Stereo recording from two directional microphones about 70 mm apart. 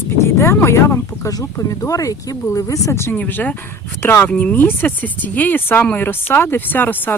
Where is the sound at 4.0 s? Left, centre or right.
Left.